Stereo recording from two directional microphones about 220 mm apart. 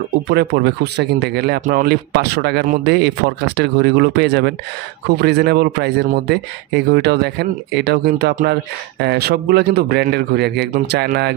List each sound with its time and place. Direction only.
0.3 s speech: 50° right (ahead or behind)